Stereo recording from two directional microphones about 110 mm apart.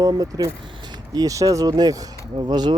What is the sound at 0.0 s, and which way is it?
Speech, 35° right (ahead or behind).